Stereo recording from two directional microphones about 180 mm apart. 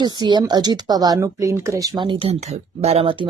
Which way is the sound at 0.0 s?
25° right (ahead or behind).